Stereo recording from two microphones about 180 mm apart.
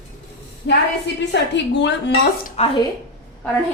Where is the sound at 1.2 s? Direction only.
80° left.